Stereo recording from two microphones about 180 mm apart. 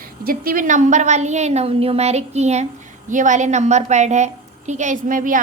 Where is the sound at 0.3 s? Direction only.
50° right (ahead or behind).